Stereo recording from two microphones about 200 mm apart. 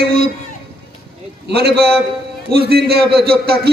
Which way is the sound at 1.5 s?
50° right (ahead or behind).